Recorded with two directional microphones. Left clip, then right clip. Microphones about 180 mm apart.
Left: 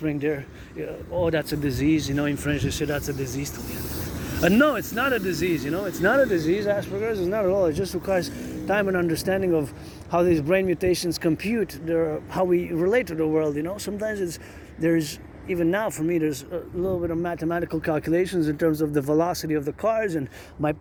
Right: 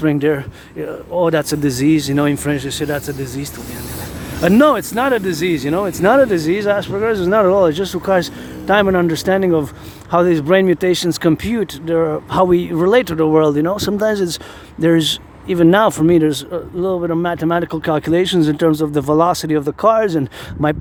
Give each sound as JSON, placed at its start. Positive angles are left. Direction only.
{"t": 0.0, "sound": "speech", "side_deg": -40}